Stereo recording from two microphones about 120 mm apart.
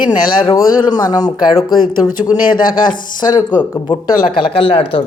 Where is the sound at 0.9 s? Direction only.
35° left (ahead or behind).